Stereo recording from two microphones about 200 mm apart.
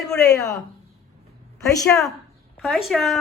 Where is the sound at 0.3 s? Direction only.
15° left (ahead or behind).